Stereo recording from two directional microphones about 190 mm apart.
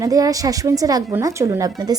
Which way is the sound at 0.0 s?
20° right (ahead or behind).